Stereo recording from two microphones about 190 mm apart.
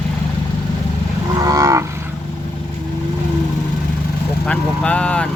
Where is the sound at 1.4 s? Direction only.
15° right (ahead or behind).